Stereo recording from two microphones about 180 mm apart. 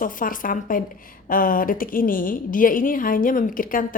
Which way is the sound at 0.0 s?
50° left (ahead or behind).